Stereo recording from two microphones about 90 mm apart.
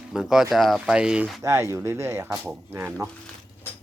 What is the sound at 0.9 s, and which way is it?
Speech, 10° right (ahead or behind).